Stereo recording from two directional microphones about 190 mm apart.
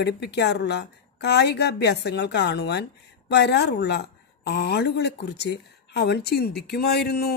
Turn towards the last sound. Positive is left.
turn(degrees=55)  # may be behind; listen again after turning